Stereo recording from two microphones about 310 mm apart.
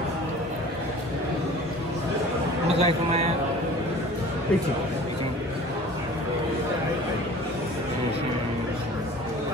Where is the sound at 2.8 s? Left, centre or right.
Centre.